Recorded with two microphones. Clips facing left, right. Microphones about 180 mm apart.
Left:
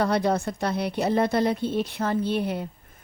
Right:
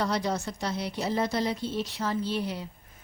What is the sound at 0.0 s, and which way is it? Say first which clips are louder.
A woman's voice: left 6 dB; 60° left (ahead or behind).